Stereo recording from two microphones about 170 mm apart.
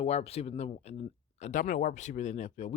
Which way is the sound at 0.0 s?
40° left (ahead or behind).